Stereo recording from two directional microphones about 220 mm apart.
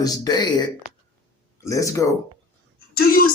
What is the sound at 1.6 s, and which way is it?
Speech, 15° left (ahead or behind).